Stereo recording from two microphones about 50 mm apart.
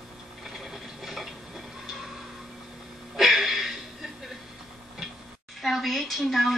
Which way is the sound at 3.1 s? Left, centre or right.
Centre.